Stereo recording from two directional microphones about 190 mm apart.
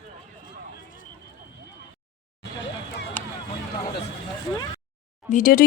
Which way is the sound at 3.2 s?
10° left (ahead or behind).